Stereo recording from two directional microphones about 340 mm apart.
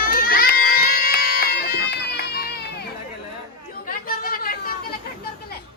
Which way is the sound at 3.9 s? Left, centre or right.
Left.